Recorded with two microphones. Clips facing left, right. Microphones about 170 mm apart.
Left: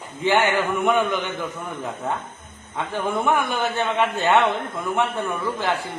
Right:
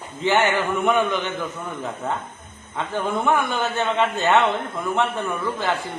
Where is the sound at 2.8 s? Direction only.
15° left (ahead or behind).